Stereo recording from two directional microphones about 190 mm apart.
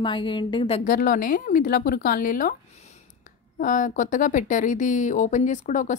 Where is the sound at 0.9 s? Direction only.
45° left (ahead or behind).